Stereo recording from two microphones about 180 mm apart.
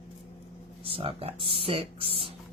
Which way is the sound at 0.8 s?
30° right (ahead or behind).